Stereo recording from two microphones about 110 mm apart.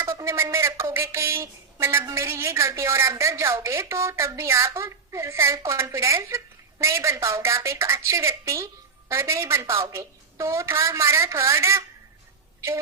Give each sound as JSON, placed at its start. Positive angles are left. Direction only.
{"t": 0.0, "sound": "speech", "side_deg": -25}